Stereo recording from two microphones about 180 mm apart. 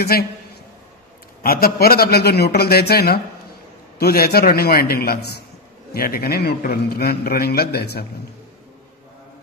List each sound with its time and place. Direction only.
0.1 s a man's voice: 55° left (ahead or behind)
1.4 s a man's voice: 55° left (ahead or behind)